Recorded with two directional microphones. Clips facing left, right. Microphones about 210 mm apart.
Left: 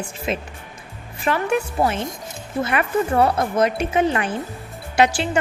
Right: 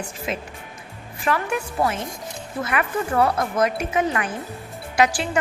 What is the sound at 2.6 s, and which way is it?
A woman's voice, 30° left (ahead or behind).